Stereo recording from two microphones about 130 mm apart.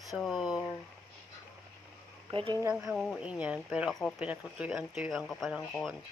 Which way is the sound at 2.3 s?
40° right (ahead or behind).